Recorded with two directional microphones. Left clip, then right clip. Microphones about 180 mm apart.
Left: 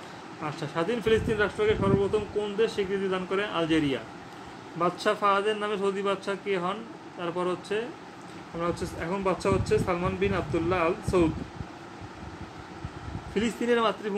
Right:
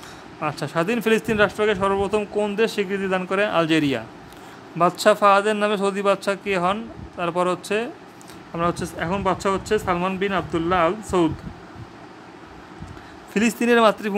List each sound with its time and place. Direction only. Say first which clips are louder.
0.4 s speech: right 7 dB; 50° right (ahead or behind)
13.3 s speech: right 7 dB; 45° right (ahead or behind)